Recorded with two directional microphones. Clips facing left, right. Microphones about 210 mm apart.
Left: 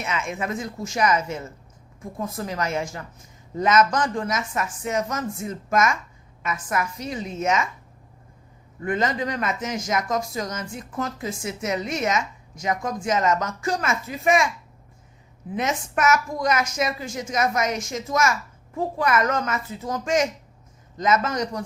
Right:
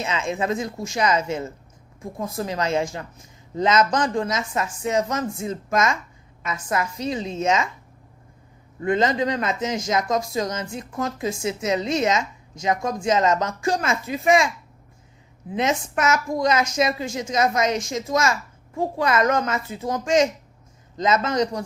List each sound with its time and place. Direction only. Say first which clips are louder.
0.0 s speech: right 3 dB; 25° right (ahead or behind)
8.8 s speech: right 4 dB; 25° right (ahead or behind)
15.5 s speech: right 2 dB; 30° right (ahead or behind)